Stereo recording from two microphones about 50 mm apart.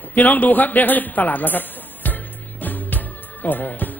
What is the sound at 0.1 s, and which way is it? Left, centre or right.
A man's voice, left.